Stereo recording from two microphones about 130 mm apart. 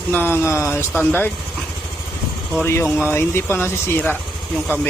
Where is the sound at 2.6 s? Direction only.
20° left (ahead or behind).